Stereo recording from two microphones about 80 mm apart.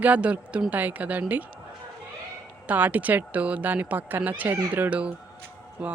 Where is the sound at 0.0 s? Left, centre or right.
Centre.